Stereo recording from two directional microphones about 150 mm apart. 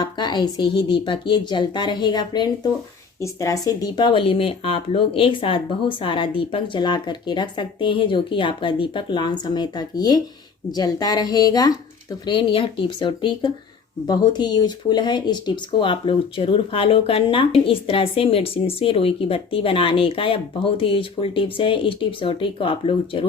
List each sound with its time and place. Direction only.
0.0 s a woman's voice: 30° left (ahead or behind)